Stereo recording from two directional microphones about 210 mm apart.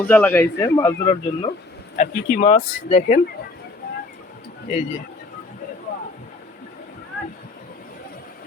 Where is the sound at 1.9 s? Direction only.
35° left (ahead or behind).